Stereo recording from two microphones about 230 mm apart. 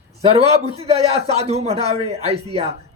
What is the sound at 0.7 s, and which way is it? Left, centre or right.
A man's voice, right.